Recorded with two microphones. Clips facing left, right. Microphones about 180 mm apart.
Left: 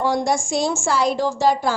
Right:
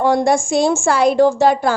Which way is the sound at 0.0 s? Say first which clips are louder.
Right 6 dB; 55° right (ahead or behind).